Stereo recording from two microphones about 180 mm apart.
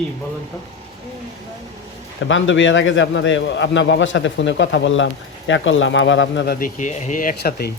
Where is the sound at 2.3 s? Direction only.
90° left.